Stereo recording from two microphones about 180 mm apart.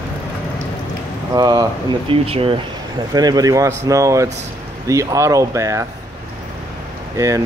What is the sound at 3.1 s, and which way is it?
Speech, 20° right (ahead or behind).